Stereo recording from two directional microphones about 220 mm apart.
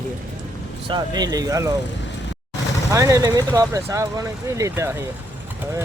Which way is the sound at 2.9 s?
15° right (ahead or behind).